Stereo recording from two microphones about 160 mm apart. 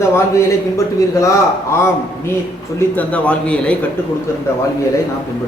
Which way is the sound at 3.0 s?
10° left (ahead or behind).